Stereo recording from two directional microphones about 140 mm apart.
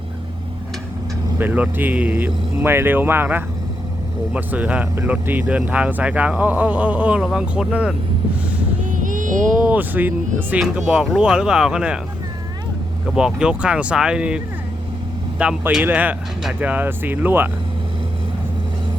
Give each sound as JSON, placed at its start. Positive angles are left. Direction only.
{"t": 1.4, "sound": "speech", "side_deg": -10}
{"t": 8.8, "sound": "a sound", "side_deg": -70}
{"t": 9.6, "sound": "speech", "side_deg": -10}
{"t": 13.1, "sound": "speech", "side_deg": -5}